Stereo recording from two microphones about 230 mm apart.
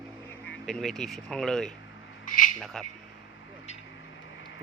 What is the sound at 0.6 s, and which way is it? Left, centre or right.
A man's voice, centre.